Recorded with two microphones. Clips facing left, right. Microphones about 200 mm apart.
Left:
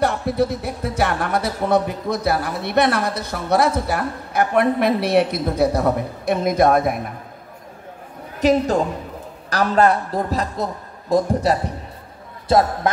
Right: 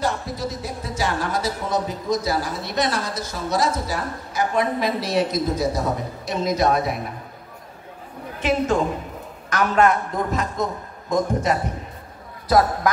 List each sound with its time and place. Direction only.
0.0 s speech: 60° left (ahead or behind)
8.4 s a man's voice: 40° left (ahead or behind)